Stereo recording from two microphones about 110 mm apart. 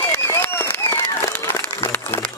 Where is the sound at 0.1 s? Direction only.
20° left (ahead or behind).